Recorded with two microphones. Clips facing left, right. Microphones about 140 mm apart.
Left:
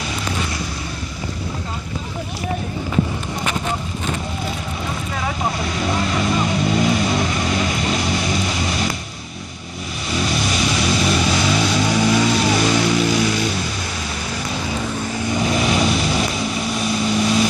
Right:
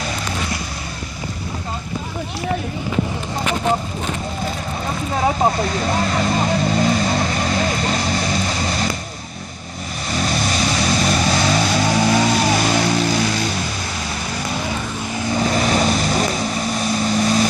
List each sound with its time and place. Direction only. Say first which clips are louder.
5.1 s vehicle: right 8 dB; 35° right (ahead or behind)
10.1 s vehicle: even; 40° right (ahead or behind)
15.4 s vehicle: right 1 dB; 40° right (ahead or behind)